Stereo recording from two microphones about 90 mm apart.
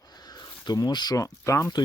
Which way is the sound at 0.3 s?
50° left (ahead or behind).